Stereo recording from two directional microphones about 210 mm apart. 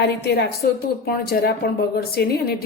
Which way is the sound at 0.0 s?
50° left (ahead or behind).